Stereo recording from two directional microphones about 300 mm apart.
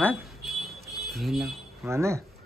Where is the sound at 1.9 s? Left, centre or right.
Centre.